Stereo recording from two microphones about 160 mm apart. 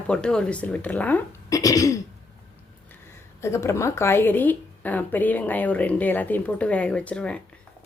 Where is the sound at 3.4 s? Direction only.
15° left (ahead or behind).